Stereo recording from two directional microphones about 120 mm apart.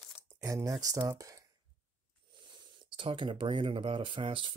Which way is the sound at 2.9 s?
45° right (ahead or behind).